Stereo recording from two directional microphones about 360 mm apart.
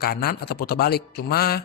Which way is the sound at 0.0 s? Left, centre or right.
Left.